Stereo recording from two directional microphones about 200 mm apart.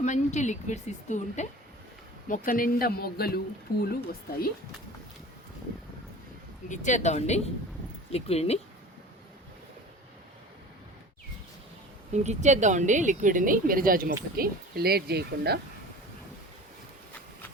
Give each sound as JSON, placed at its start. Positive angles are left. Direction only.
{"t": 0.0, "sound": "speech", "side_deg": 35}
{"t": 6.7, "sound": "speech", "side_deg": 35}
{"t": 12.1, "sound": "speech", "side_deg": -35}